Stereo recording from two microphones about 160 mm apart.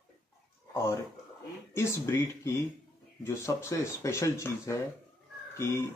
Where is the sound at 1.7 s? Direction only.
15° left (ahead or behind).